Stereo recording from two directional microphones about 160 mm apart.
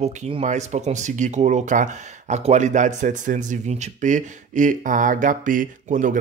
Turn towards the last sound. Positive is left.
turn(degrees=-55)  # may be behind; listen again after turning